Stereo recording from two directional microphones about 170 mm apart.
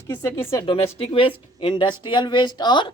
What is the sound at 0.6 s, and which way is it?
A woman's voice, 35° left (ahead or behind).